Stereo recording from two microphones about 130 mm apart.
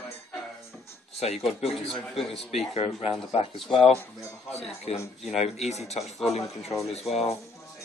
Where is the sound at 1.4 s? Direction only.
50° left (ahead or behind).